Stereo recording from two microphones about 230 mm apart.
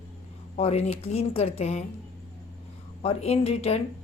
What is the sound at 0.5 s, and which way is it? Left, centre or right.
Speech, left.